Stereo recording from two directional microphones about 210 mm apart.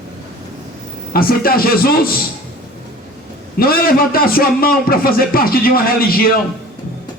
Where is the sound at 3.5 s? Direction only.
45° left (ahead or behind).